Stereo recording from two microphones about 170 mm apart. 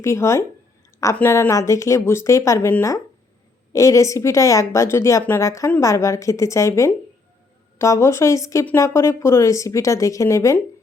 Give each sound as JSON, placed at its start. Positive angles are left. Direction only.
{"t": 0.0, "sound": "a woman's voice", "side_deg": 15}